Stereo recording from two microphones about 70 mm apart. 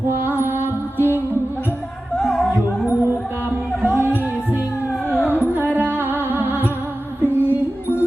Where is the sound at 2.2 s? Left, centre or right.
Centre.